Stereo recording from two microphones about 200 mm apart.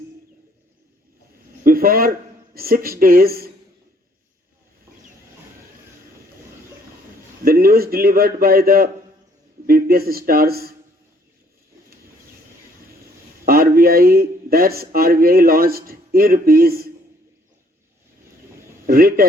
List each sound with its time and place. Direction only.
1.6 s a sound: 45° right (ahead or behind)
2.6 s a man's voice: 50° right (ahead or behind)
7.4 s a man's voice: 50° right (ahead or behind)
13.4 s a man's voice: 45° right (ahead or behind)
18.9 s a man's voice: 45° right (ahead or behind)